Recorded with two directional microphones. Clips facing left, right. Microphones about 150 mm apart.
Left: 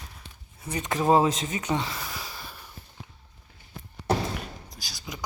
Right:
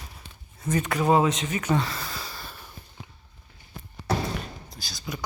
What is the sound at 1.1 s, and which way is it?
Speech, 35° left (ahead or behind).